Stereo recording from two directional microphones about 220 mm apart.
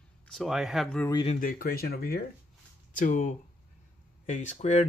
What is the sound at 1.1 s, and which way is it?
Speech, 25° left (ahead or behind).